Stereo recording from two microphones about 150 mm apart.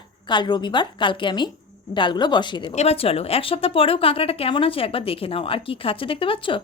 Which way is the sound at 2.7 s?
40° left (ahead or behind).